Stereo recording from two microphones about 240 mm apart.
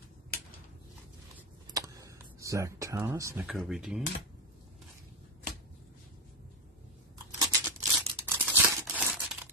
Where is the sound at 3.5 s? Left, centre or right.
Centre.